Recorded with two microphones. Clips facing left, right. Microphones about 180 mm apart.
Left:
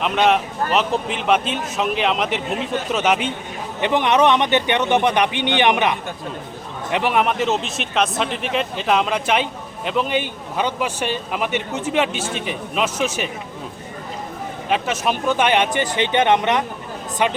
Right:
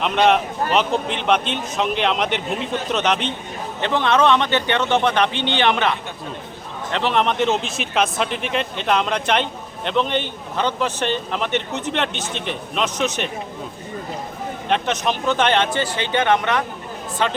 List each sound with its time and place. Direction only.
0.0 s speech: centre (ahead or behind)
14.7 s speech: 5° left (ahead or behind)